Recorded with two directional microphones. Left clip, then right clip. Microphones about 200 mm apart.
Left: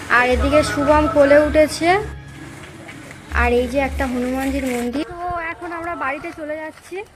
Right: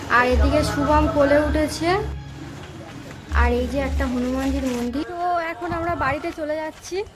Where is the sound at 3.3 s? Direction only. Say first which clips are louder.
Left 5 dB; 15° left (ahead or behind).